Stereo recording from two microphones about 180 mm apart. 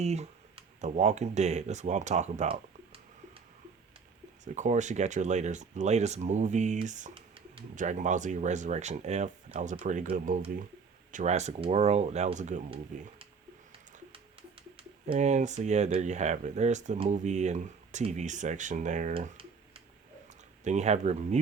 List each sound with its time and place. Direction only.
0.0 s speech: 40° right (ahead or behind)
4.4 s speech: 40° right (ahead or behind)
7.1 s a sound: 30° right (ahead or behind)
7.8 s speech: 45° right (ahead or behind)
15.1 s speech: 40° right (ahead or behind)
19.1 s typing: 30° right (ahead or behind)
20.7 s speech: 40° right (ahead or behind)